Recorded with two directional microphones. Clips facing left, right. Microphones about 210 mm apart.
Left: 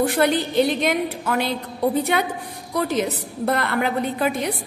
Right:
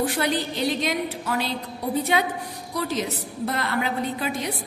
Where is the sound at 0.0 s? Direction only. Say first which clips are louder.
Left 5 dB; 55° left (ahead or behind).